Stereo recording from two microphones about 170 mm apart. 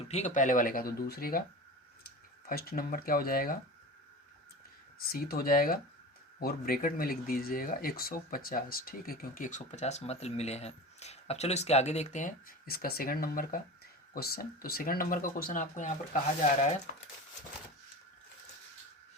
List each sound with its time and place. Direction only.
0.1 s speech: 40° left (ahead or behind); by 1.5 s 60° left (ahead or behind)
2.5 s speech: 60° left (ahead or behind)
5.0 s speech: 60° left (ahead or behind)